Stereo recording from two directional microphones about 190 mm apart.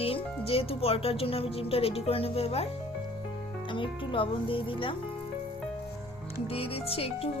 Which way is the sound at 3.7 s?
25° left (ahead or behind).